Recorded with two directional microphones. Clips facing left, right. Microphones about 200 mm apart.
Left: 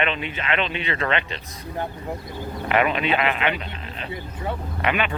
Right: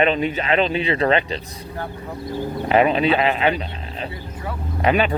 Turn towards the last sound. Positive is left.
turn(degrees=-35)  # may be behind; listen again after turning